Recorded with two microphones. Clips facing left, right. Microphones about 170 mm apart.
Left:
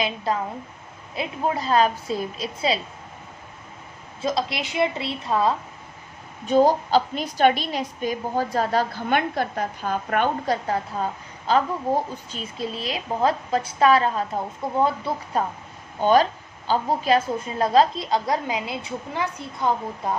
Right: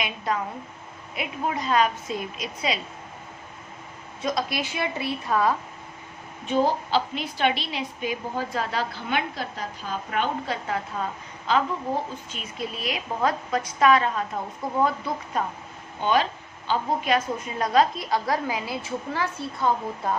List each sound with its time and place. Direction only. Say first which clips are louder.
1.1 s a woman's voice: left 3 dB; 30° left (ahead or behind)
4.2 s a woman's voice: left 2 dB; 25° left (ahead or behind)
6.4 s a woman's voice: left 5 dB; 40° left (ahead or behind)
16.0 s a woman's voice: left 5 dB; 40° left (ahead or behind); by 20.1 s 20° left (ahead or behind)